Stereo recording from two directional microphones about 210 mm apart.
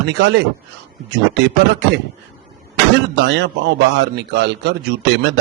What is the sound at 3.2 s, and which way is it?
A man's voice, 55° right (ahead or behind).